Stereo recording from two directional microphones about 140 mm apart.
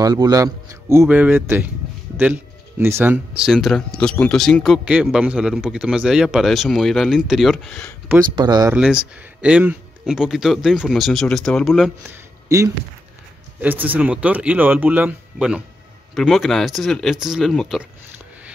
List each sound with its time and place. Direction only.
0.0 s speech: 25° right (ahead or behind); by 7.9 s 5° left (ahead or behind)
8.4 s speech: 30° right (ahead or behind)
8.7 s speech: 5° right (ahead or behind)
12.1 s a sound: 20° right (ahead or behind)
13.6 s speech: 10° right (ahead or behind)